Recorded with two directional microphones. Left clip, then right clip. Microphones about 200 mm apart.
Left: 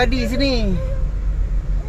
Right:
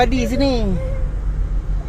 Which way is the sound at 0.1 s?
5° right (ahead or behind).